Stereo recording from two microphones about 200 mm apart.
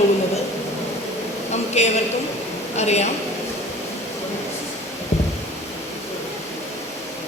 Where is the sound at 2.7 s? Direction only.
35° left (ahead or behind).